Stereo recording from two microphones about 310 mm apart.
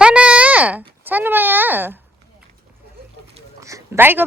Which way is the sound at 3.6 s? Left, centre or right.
Centre.